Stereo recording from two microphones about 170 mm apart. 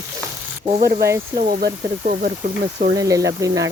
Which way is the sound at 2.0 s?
45° right (ahead or behind).